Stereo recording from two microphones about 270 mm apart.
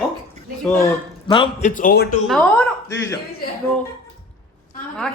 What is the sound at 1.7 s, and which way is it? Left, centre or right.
Speech, left.